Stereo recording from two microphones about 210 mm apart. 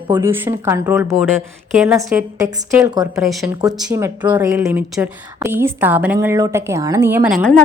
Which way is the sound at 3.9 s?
15° right (ahead or behind).